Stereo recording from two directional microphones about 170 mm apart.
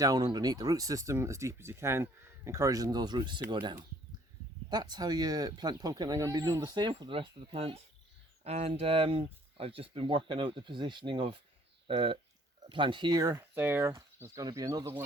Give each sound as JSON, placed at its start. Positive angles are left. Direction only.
{"t": 0.0, "sound": "speech", "side_deg": -25}